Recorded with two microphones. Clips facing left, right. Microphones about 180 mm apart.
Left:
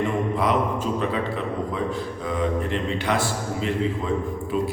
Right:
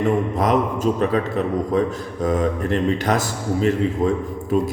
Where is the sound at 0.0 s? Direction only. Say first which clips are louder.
Right 4 dB; 40° right (ahead or behind).